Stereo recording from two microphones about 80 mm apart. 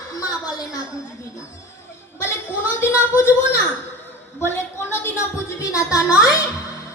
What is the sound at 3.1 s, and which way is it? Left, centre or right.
Speech, left.